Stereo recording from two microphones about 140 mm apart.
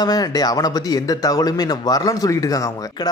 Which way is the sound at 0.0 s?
25° left (ahead or behind).